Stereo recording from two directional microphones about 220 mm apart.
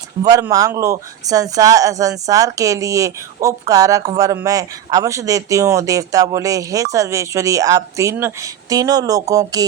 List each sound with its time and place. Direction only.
0.2 s speech: 15° right (ahead or behind)